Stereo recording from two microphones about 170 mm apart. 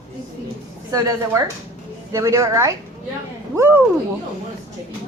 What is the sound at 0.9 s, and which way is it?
A woman's voice, 20° right (ahead or behind).